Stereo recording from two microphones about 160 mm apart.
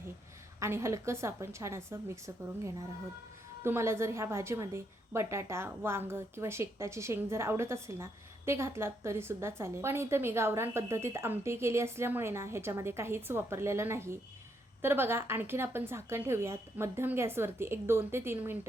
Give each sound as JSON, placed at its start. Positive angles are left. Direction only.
{"t": 0.6, "sound": "a woman's voice", "side_deg": -15}